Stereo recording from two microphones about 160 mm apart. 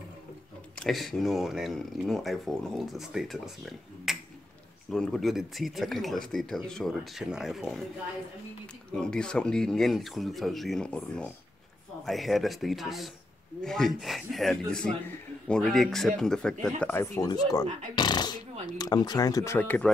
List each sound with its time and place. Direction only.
0.7 s speech: centre (ahead or behind)
8.9 s speech: 5° left (ahead or behind)